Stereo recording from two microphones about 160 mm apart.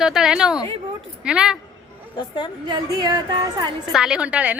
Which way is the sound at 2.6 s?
25° right (ahead or behind).